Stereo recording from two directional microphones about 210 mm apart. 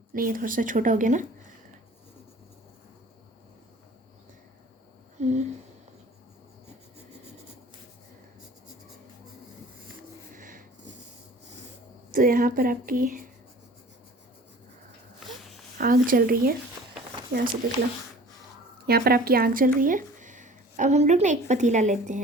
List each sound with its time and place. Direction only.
0.1 s speech: 40° right (ahead or behind)
5.2 s a sound: 30° right (ahead or behind)
10.3 s a sound: 40° right (ahead or behind)
12.1 s speech: 40° right (ahead or behind)
15.8 s speech: 40° right (ahead or behind)
18.9 s speech: 45° right (ahead or behind)